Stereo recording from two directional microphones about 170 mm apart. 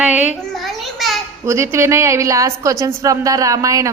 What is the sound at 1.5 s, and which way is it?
A woman's voice, 15° right (ahead or behind).